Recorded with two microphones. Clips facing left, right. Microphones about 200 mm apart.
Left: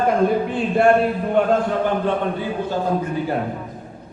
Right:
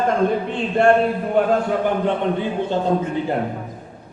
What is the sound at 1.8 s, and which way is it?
A man's voice, 20° right (ahead or behind).